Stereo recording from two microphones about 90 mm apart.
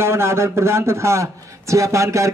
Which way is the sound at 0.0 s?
30° right (ahead or behind).